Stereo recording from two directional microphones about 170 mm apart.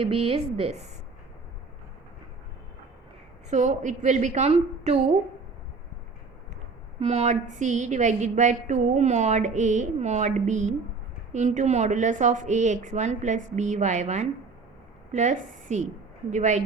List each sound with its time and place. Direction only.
0.0 s a woman's voice: 35° right (ahead or behind)
3.5 s a woman's voice: 45° right (ahead or behind)
7.0 s a woman's voice: 40° right (ahead or behind)